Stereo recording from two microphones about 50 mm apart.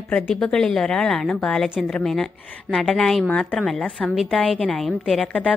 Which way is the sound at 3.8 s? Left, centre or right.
Left.